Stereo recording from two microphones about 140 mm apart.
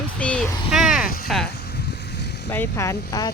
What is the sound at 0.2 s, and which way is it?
Vehicle, 10° left (ahead or behind).